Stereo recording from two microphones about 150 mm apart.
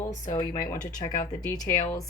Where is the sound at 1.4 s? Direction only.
25° left (ahead or behind).